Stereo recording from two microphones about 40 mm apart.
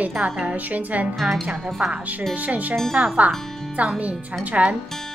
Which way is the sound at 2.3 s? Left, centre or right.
Right.